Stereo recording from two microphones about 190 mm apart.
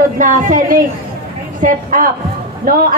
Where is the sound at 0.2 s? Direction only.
45° right (ahead or behind).